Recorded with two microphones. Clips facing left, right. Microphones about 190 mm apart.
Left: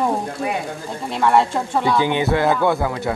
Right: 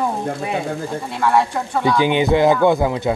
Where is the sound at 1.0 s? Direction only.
20° left (ahead or behind).